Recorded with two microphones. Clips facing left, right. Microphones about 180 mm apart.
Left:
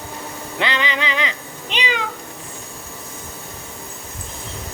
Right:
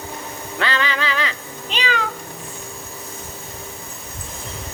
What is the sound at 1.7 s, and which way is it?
Cat, 15° left (ahead or behind).